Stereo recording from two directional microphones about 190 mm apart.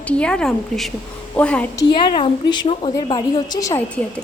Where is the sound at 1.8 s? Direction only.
25° left (ahead or behind).